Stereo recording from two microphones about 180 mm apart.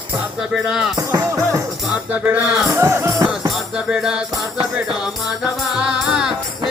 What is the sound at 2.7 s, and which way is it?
Music, 15° right (ahead or behind).